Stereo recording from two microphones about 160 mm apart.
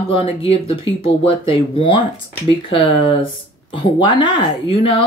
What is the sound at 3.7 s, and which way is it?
Speech, 30° left (ahead or behind).